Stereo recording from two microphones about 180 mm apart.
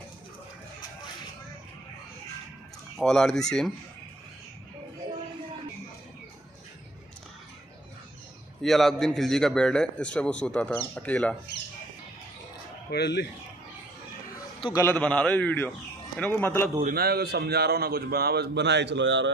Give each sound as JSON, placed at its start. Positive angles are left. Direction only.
{"t": 3.0, "sound": "a man's voice", "side_deg": 0}
{"t": 8.6, "sound": "a man's voice", "side_deg": 0}
{"t": 12.9, "sound": "speech", "side_deg": 70}
{"t": 14.6, "sound": "a man's voice", "side_deg": 20}
{"t": 16.8, "sound": "a man's voice", "side_deg": -60}